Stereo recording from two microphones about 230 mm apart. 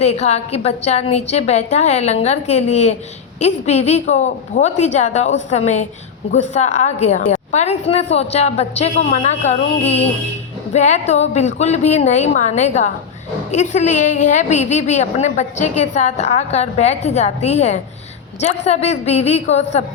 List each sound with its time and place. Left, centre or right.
0.0 s a woman's voice: left